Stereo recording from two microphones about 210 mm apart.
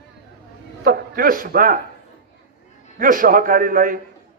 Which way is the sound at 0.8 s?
45° right (ahead or behind).